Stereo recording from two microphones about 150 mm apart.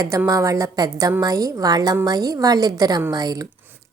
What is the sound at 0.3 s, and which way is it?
A woman's voice, 20° right (ahead or behind).